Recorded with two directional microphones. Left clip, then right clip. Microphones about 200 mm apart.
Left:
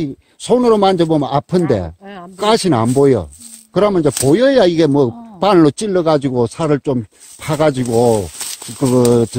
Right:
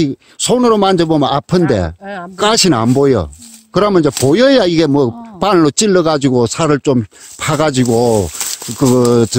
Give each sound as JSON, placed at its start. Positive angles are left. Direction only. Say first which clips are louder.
{"t": 0.0, "sound": "a man's voice", "louder": "right 8 dB", "side_deg": -30}
{"t": 2.0, "sound": "speech", "louder": "right 8 dB", "side_deg": -45}
{"t": 2.3, "sound": "speech", "louder": "right 2 dB", "side_deg": -30}